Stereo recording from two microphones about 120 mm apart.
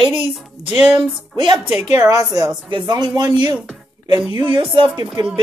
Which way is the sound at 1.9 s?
25° right (ahead or behind).